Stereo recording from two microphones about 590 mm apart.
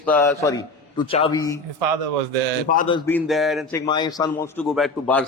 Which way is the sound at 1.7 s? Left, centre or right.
Right.